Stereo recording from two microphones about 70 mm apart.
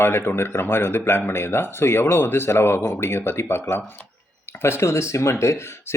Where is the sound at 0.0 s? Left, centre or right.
Left.